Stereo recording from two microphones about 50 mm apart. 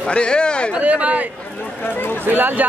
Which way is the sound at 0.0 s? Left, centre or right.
Left.